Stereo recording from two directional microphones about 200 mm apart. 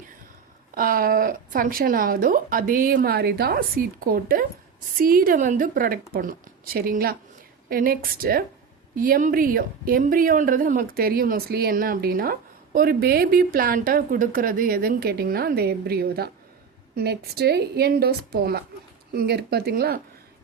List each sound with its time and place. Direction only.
0.7 s speech: 45° right (ahead or behind)